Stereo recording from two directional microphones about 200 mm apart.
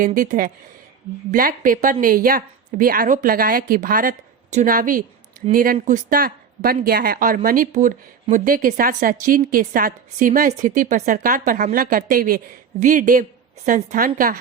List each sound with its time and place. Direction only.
0.0 s speech: 40° right (ahead or behind)